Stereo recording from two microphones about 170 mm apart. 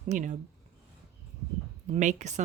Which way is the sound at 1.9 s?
45° right (ahead or behind).